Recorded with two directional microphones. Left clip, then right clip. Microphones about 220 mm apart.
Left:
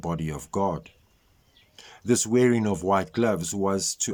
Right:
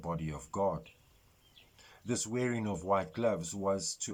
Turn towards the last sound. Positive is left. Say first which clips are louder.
# left 8 dB
turn(degrees=50)  # may be behind; listen again after turning